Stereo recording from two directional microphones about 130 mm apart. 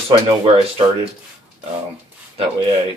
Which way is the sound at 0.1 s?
40° right (ahead or behind).